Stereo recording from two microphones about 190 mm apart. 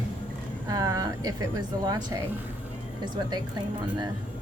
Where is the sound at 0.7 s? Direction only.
20° right (ahead or behind).